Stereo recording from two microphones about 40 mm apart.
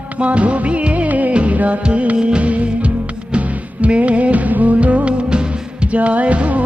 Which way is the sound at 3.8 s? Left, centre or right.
Right.